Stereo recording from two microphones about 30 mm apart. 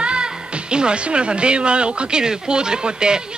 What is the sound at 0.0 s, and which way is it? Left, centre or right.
Speech, right.